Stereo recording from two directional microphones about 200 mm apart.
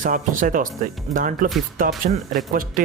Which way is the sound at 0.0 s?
45° right (ahead or behind).